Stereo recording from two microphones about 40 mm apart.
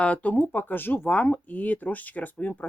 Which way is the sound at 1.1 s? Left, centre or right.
Left.